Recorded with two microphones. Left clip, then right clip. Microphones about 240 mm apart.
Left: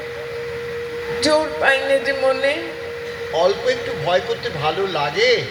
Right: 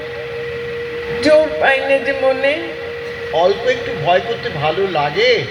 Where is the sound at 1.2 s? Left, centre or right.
Left.